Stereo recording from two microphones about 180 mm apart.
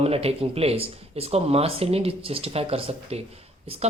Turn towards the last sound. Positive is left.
turn(degrees=-35)  # may be behind; listen again after turning